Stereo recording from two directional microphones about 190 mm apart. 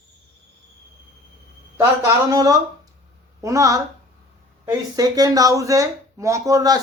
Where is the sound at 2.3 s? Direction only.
20° right (ahead or behind).